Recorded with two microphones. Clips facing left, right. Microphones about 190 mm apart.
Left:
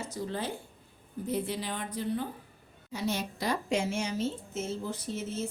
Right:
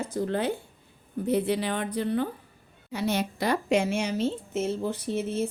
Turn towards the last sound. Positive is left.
turn(degrees=-65)  # may be behind; listen again after turning